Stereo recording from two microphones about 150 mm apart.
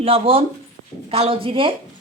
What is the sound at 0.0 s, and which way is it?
A woman's voice, 40° right (ahead or behind).